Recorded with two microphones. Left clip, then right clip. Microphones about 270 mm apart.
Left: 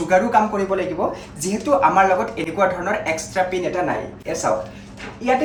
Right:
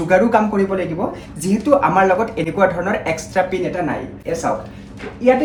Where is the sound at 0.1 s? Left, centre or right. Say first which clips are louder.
Right 2 dB; centre.